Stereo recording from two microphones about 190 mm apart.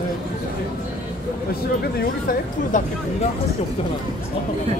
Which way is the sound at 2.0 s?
50° left (ahead or behind).